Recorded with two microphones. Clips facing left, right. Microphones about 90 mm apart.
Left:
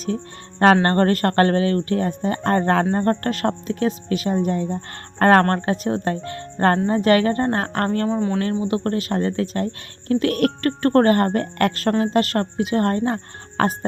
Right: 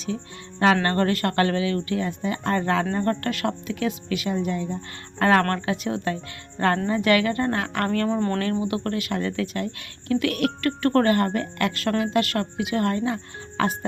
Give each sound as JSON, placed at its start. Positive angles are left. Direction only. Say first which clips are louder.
{"t": 0.6, "sound": "speech", "louder": "left 5 dB", "side_deg": 45}
{"t": 7.9, "sound": "speech", "louder": "even", "side_deg": 20}
{"t": 8.6, "sound": "speech", "louder": "left 4 dB", "side_deg": 35}